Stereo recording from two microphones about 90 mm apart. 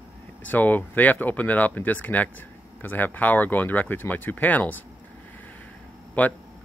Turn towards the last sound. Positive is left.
turn(degrees=15)  # may be behind; listen again after turning